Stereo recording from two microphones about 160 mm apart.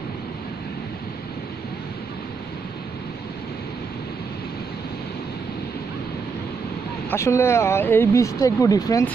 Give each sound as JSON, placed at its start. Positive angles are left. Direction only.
{"t": 7.1, "sound": "speech", "side_deg": 15}